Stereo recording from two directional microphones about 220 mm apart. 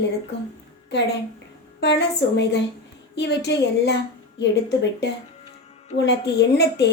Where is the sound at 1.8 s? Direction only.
50° left (ahead or behind).